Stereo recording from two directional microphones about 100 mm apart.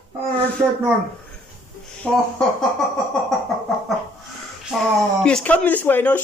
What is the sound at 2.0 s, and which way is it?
Speech, 10° left (ahead or behind).